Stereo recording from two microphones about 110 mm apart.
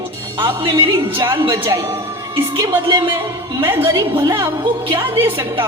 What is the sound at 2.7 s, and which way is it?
Speech, 45° right (ahead or behind).